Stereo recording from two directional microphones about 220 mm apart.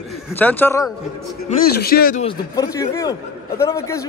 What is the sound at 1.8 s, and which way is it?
Speech, 45° left (ahead or behind).